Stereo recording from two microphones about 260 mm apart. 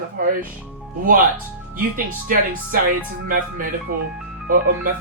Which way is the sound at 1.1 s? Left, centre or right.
Right.